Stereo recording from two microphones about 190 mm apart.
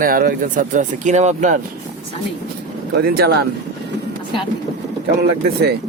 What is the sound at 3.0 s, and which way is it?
Speech, 55° right (ahead or behind).